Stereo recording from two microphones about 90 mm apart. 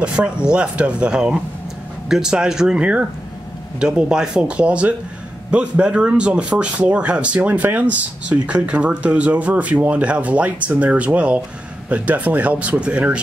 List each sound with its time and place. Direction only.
0.0 s speech: 10° right (ahead or behind)